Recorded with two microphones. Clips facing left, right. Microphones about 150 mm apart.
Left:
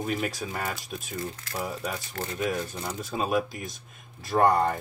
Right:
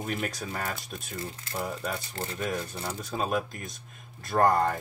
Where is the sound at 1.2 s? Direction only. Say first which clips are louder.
Left 2 dB; 25° right (ahead or behind).